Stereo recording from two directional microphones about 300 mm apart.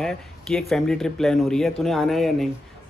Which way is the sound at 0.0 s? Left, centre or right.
Centre.